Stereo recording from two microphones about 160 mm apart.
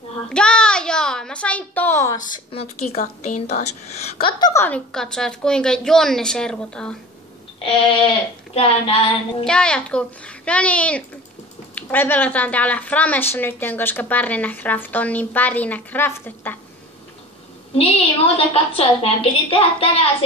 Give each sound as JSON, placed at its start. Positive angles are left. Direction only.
{"t": 0.3, "sound": "a sound", "side_deg": 5}
{"t": 2.5, "sound": "a woman's voice", "side_deg": 45}
{"t": 4.6, "sound": "a woman's voice", "side_deg": 5}
{"t": 8.5, "sound": "a woman's voice", "side_deg": 35}
{"t": 9.4, "sound": "a woman's voice", "side_deg": 5}
{"t": 17.7, "sound": "a woman's voice", "side_deg": 40}